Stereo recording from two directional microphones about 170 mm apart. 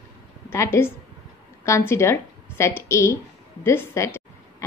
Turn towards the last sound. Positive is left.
turn(degrees=15)  # may be behind; listen again after turning